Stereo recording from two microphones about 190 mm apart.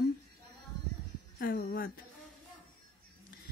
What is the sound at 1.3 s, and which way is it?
Speech, 50° left (ahead or behind).